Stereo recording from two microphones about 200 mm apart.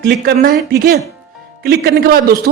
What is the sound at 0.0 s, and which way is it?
A man's voice, 50° right (ahead or behind).